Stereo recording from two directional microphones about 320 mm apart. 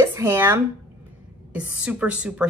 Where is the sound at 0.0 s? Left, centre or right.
Centre.